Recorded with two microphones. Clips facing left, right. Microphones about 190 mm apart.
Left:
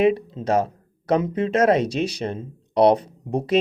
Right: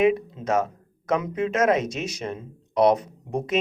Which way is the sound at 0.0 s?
30° left (ahead or behind).